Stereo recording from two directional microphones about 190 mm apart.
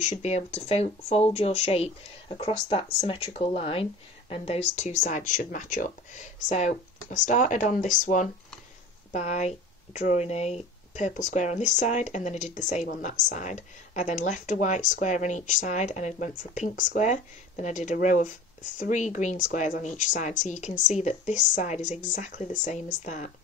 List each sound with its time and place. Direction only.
0.0 s speech: 40° left (ahead or behind)